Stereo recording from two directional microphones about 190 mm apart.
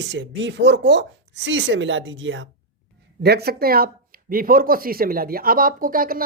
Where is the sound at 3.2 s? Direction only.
60° right (ahead or behind).